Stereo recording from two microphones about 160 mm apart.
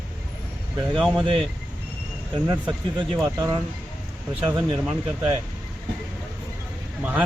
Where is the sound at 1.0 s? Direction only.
Centre (ahead or behind).